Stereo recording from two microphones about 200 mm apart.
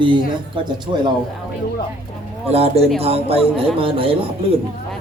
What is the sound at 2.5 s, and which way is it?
A man's voice, 30° right (ahead or behind).